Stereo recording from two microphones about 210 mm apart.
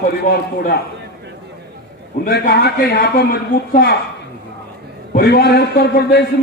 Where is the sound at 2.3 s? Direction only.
45° left (ahead or behind).